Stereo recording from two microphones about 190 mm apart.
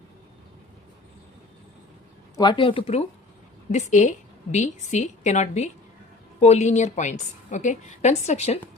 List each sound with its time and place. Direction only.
2.3 s a woman's voice: 25° left (ahead or behind)